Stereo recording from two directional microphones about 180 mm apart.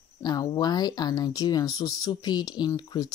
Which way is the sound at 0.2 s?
20° left (ahead or behind).